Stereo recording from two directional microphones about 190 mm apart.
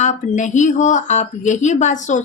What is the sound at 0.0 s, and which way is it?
Speech, 40° left (ahead or behind).